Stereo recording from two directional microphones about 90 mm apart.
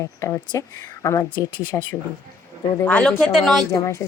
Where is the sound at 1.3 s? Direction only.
60° left (ahead or behind).